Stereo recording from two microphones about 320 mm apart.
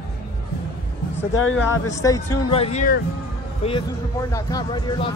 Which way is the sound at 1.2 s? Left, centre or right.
Left.